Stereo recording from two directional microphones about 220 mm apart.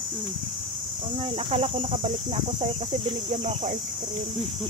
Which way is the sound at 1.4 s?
25° right (ahead or behind).